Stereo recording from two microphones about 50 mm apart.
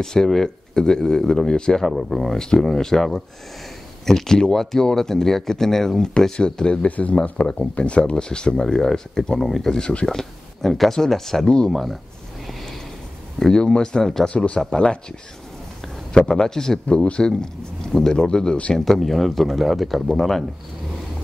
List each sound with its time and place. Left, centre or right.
0.0 s speech: centre
6.9 s speech: left; by 11.4 s centre
11.4 s speech: centre
11.7 s speech: centre
13.4 s speech: centre
14.3 s speech: left
14.6 s speech: centre
16.1 s speech: centre
16.8 s speech: left
17.3 s speech: centre
18.9 s speech: centre